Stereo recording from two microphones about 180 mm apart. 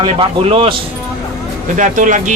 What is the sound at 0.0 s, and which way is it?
Speech, 30° right (ahead or behind).